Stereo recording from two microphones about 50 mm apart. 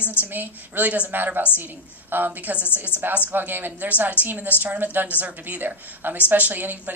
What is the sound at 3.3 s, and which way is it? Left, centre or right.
A woman's voice, right.